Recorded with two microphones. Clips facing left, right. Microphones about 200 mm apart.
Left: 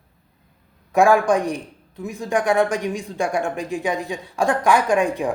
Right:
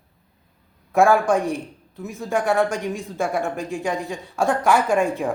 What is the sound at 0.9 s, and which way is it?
Speech, centre (ahead or behind).